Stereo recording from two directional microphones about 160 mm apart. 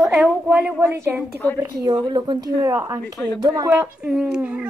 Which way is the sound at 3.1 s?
15° left (ahead or behind).